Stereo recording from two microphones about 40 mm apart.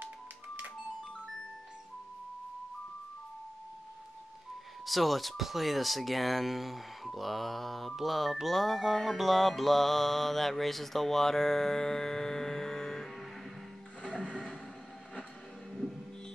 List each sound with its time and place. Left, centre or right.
4.8 s speech: centre
9.2 s mantra: centre
14.0 s music: left